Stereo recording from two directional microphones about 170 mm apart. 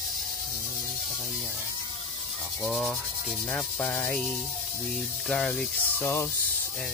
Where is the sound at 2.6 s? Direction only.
Centre (ahead or behind).